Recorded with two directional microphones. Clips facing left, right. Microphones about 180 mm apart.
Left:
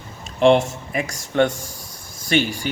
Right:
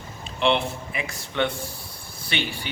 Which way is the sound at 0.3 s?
45° left (ahead or behind).